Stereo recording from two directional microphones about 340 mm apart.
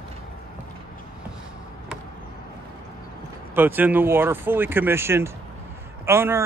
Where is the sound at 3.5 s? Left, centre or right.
Centre.